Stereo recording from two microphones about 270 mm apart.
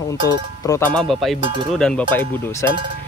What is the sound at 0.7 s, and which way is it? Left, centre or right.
Speech, centre.